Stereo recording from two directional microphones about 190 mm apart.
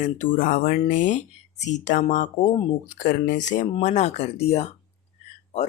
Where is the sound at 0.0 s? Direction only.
45° left (ahead or behind).